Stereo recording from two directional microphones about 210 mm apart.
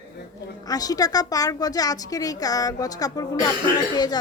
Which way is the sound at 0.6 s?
15° left (ahead or behind).